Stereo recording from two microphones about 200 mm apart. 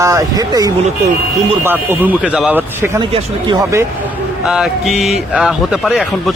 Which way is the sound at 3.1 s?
20° right (ahead or behind).